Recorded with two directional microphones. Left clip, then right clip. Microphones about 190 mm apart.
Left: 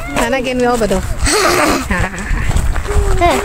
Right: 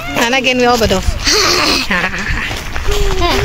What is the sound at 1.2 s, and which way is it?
Speech, 55° left (ahead or behind).